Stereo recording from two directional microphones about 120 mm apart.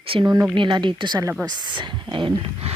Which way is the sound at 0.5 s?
40° right (ahead or behind).